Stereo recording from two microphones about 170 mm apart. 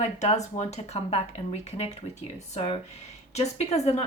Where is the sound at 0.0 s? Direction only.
40° left (ahead or behind).